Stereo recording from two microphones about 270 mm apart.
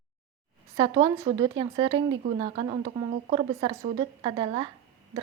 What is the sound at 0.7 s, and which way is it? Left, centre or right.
Speech, centre.